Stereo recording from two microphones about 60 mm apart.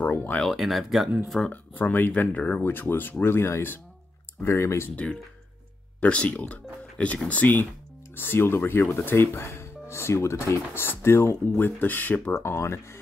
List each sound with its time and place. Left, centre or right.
0.0 s speech: left
0.5 s speech: centre
1.5 s speech: left
2.6 s speech: left
4.9 s speech: left
8.2 s speech: left
10.8 s speech: left
12.4 s speech: left